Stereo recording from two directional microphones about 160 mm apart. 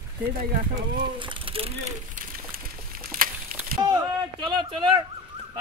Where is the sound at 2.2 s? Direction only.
60° right (ahead or behind).